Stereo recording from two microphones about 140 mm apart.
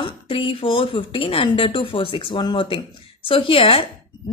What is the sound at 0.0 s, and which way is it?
A woman's voice, 40° left (ahead or behind).